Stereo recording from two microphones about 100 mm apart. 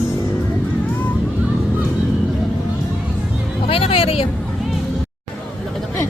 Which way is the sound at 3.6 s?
70° left (ahead or behind).